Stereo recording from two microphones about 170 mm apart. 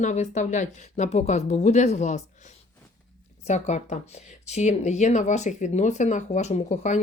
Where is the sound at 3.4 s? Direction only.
40° left (ahead or behind).